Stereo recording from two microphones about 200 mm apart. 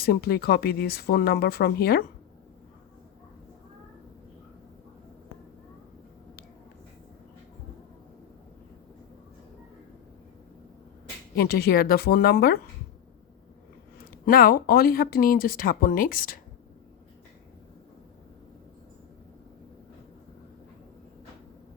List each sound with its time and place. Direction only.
0.0 s speech: 50° left (ahead or behind)
11.3 s speech: 50° left (ahead or behind)
14.0 s speech: 45° left (ahead or behind)